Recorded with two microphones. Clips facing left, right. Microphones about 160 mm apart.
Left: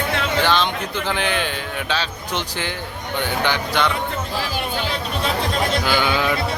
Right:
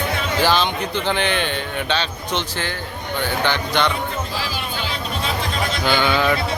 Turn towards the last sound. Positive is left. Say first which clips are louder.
# right 2 dB
turn(degrees=10)  # may be behind; listen again after turning